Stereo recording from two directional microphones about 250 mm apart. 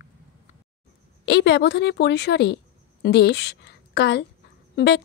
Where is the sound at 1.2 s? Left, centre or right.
Left.